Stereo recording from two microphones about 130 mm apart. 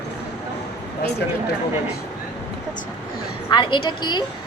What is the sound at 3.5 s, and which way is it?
Speech, 35° left (ahead or behind).